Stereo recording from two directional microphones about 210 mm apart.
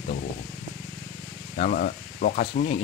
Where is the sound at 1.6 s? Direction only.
40° left (ahead or behind).